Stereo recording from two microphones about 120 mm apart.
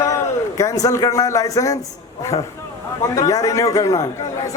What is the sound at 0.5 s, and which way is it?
Speech, 30° left (ahead or behind).